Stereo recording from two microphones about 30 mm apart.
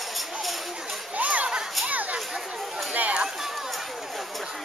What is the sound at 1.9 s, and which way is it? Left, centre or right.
Chatter, right.